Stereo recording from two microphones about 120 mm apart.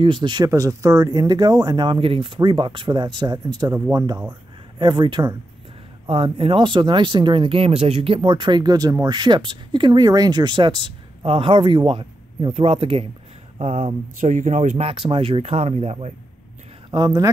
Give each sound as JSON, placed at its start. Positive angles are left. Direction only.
{"t": 0.0, "sound": "speech", "side_deg": -45}
{"t": 0.5, "sound": "speech", "side_deg": -25}
{"t": 14.2, "sound": "speech", "side_deg": -90}
{"t": 16.9, "sound": "speech", "side_deg": -35}